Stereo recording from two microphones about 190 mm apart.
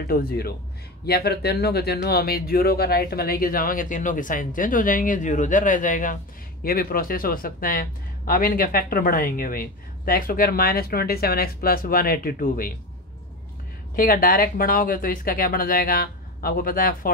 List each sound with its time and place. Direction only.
0.0 s speech: 50° left (ahead or behind)
13.9 s speech: 50° left (ahead or behind)